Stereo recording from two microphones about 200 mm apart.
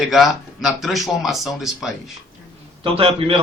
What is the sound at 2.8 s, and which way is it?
Speech, 25° right (ahead or behind).